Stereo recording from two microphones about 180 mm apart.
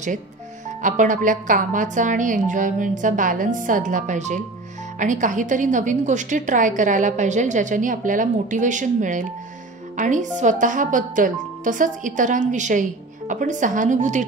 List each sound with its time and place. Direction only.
0.8 s a woman's voice: 45° right (ahead or behind)